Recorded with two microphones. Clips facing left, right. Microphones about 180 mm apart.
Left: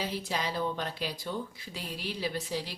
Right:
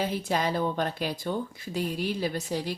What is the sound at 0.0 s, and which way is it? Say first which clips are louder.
A woman's voice: right 6 dB; 50° right (ahead or behind).